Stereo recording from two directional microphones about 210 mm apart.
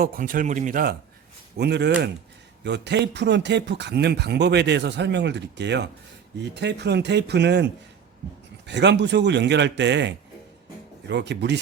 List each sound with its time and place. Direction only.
0.0 s speech: 45° right (ahead or behind)
1.5 s speech: 55° right (ahead or behind)